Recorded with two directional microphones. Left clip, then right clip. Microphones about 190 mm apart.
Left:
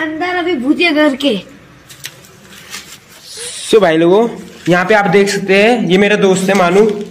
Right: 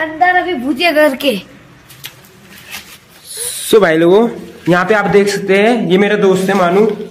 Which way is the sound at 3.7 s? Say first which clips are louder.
Even; 20° right (ahead or behind).